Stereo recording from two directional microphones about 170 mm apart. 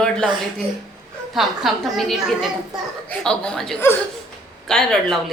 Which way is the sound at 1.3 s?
Centre (ahead or behind).